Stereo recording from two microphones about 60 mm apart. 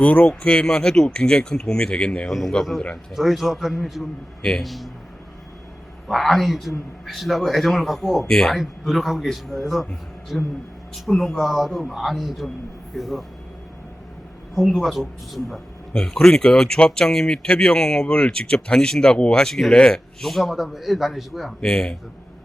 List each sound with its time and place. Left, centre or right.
0.0 s speech: left
3.2 s a man's voice: centre
6.1 s a man's voice: centre
8.3 s speech: centre
8.5 s a man's voice: centre
14.7 s a man's voice: centre
15.9 s speech: centre
20.2 s a man's voice: centre
21.6 s speech: centre